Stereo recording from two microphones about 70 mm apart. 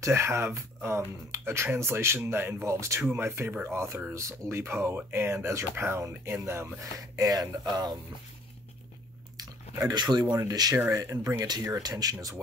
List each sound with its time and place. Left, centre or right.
0.0 s speech: right
7.2 s speech: right
9.8 s speech: right
10.5 s speech: right
10.9 s speech: right